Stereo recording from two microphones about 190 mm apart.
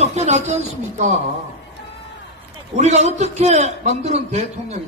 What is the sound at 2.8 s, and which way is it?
A man's voice, 35° right (ahead or behind).